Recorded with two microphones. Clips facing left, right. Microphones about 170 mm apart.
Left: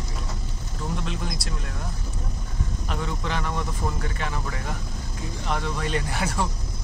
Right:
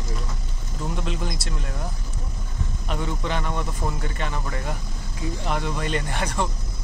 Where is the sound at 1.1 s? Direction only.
Centre (ahead or behind).